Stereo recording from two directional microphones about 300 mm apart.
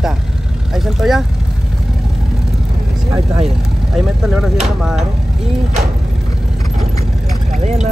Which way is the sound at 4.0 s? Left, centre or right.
Centre.